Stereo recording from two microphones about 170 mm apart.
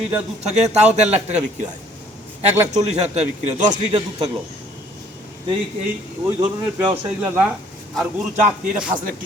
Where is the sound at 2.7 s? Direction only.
40° right (ahead or behind).